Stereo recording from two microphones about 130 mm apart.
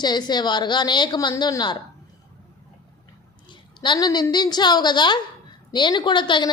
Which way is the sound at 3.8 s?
35° left (ahead or behind).